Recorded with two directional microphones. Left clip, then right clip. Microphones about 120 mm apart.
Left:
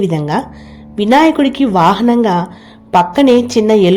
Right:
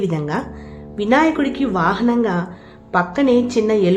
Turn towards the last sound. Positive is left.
turn(degrees=45)  # may be behind; listen again after turning